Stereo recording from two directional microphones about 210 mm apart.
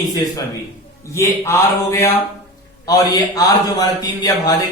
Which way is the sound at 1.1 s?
15° left (ahead or behind).